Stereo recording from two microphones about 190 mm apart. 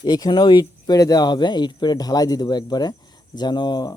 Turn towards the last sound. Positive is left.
turn(degrees=20)  # may be behind; listen again after turning